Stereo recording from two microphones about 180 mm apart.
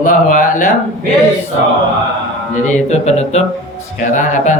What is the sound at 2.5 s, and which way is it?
Speech, 40° left (ahead or behind).